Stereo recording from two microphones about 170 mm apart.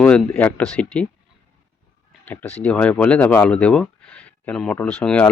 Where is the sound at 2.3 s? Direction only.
10° left (ahead or behind).